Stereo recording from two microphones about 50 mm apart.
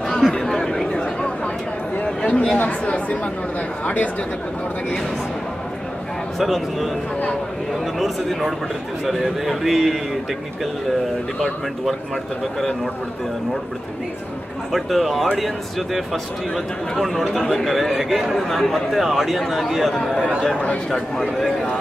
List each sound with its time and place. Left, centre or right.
0.2 s chatter: centre
2.0 s speech: centre; by 4.1 s left
6.3 s a man's voice: centre
8.0 s a man's voice: centre
14.7 s a man's voice: centre